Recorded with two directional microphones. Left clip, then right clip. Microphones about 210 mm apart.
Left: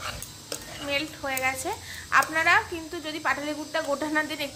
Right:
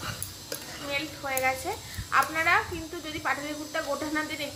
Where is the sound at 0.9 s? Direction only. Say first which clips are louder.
Left 2 dB; 50° left (ahead or behind).